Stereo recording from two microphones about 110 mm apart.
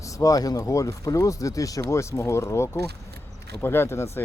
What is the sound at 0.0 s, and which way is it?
Speech, 30° left (ahead or behind).